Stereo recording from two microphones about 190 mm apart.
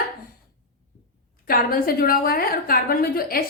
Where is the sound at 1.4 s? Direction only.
50° left (ahead or behind).